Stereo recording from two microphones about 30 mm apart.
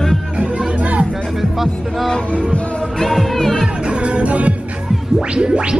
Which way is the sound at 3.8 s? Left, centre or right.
Right.